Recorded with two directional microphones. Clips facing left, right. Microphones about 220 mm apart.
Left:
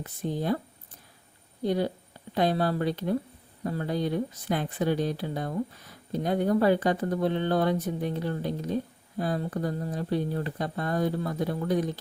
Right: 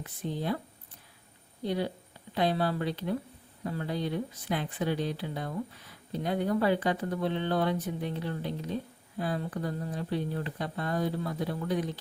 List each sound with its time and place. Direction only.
0.0 s speech: 45° left (ahead or behind)
1.6 s speech: 45° left (ahead or behind)